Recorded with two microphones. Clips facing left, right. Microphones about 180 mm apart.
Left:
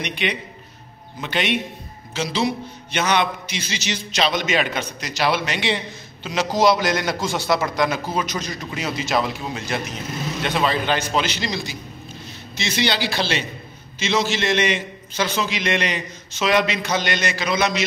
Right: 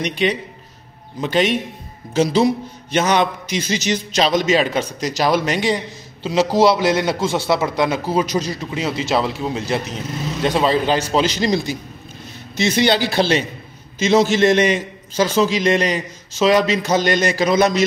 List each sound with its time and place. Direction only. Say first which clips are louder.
0.0 s a man's voice: right 6 dB; 40° right (ahead or behind)
6.2 s a man's voice: right 4 dB; 30° right (ahead or behind)